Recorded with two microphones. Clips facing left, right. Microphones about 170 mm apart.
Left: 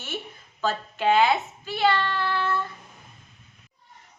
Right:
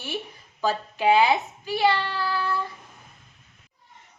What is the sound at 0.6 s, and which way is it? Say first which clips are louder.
A child's voice: right 2 dB; 15° right (ahead or behind).